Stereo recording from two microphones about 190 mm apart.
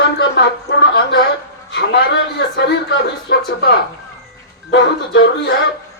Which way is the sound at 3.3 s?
60° left (ahead or behind).